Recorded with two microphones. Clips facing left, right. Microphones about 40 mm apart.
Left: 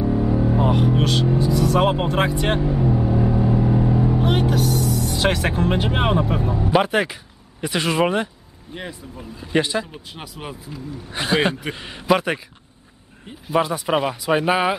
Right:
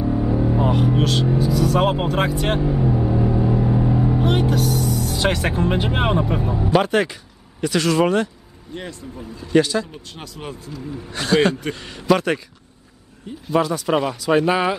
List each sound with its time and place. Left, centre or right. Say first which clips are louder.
0.0 s speech: even; centre
6.7 s speech: right 1 dB; centre
7.6 s speech: right 2 dB; left
13.6 s speech: right 1 dB; centre